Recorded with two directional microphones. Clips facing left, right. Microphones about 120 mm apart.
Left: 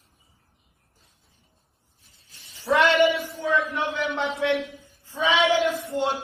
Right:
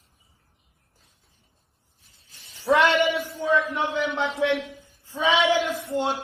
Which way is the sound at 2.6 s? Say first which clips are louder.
Left 1 dB; 15° right (ahead or behind).